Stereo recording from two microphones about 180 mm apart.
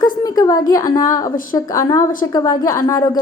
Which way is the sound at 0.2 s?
20° left (ahead or behind).